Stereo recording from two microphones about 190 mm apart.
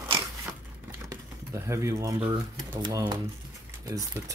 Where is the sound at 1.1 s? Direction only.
15° right (ahead or behind).